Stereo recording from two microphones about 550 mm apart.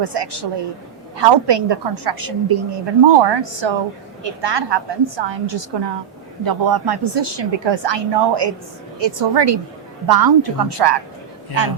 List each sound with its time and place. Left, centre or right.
0.0 s a woman's voice: right
6.4 s a woman's voice: right